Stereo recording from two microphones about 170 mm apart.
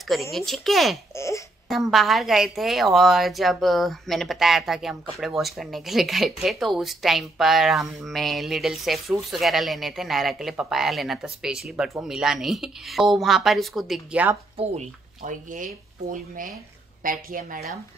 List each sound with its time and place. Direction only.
0.1 s a woman's voice: centre (ahead or behind)
1.1 s a sound: 15° left (ahead or behind)
1.7 s a woman's voice: centre (ahead or behind)
14.6 s a woman's voice: 40° right (ahead or behind)